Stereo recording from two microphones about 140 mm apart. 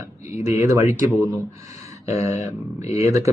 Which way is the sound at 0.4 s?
20° right (ahead or behind).